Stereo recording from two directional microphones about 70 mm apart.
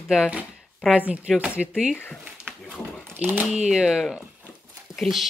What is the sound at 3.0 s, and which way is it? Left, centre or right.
Speech, right.